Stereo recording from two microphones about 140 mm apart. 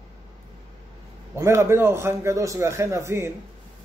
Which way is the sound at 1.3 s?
20° right (ahead or behind).